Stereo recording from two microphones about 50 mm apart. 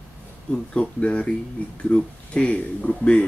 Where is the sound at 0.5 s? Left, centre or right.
Left.